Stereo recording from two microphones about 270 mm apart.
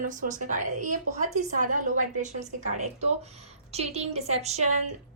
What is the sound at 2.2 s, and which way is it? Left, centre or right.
A woman's voice, right.